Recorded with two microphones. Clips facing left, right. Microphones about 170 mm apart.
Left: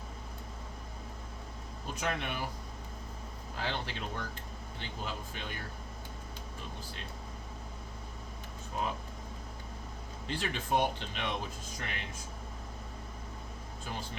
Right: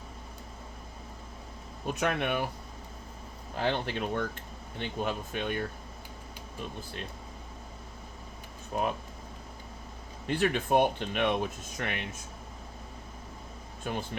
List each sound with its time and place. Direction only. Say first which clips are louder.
1.9 s speech: right 7 dB; 60° right (ahead or behind)
3.6 s speech: right 7 dB; 55° right (ahead or behind)
8.7 s speech: right 5 dB; 55° right (ahead or behind)
10.2 s speech: right 8 dB; 55° right (ahead or behind)
13.9 s speech: right 7 dB; 60° right (ahead or behind)